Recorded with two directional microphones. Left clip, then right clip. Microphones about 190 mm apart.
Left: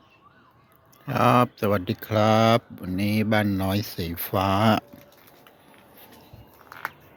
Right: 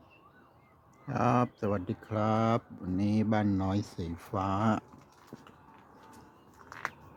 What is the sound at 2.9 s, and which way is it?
Speech, 5° left (ahead or behind).